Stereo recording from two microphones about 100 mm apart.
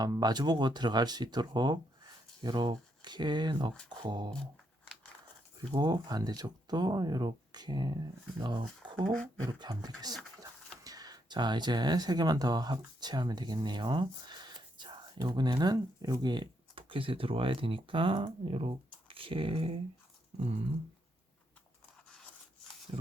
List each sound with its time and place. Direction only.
0.0 s speech: 40° right (ahead or behind)
5.7 s speech: 45° right (ahead or behind)
16.7 s speech: 60° right (ahead or behind)
22.9 s a sound: 70° right (ahead or behind)